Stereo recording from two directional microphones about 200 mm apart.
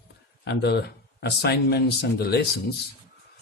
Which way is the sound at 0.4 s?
60° left (ahead or behind).